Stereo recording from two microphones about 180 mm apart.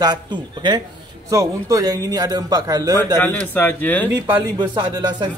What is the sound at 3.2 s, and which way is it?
Speech, 10° left (ahead or behind).